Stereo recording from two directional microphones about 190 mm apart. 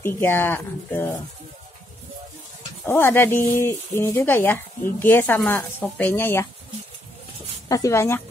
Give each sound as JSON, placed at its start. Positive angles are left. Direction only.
{"t": 0.0, "sound": "speech", "side_deg": 10}
{"t": 2.8, "sound": "speech", "side_deg": 10}
{"t": 7.6, "sound": "speech", "side_deg": 20}